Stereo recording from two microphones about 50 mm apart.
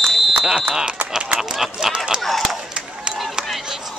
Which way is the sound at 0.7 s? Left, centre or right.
Centre.